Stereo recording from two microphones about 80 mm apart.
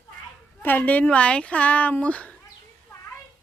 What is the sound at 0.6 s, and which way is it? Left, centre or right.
Speech, left.